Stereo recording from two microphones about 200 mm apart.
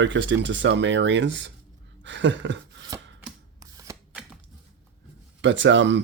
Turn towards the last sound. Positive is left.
turn(degrees=-65)  # may be behind; listen again after turning